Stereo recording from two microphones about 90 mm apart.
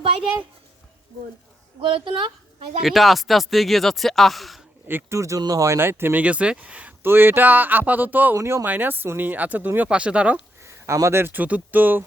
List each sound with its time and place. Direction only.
1.8 s speech: 70° right (ahead or behind)
2.8 s speech: centre (ahead or behind)
4.9 s speech: 25° right (ahead or behind)
8.4 s speech: 30° right (ahead or behind)
8.6 s speech: 20° right (ahead or behind)
10.6 s speech: 30° right (ahead or behind)